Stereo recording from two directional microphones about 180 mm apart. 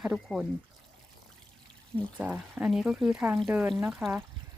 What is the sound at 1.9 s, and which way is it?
Speech, 10° right (ahead or behind).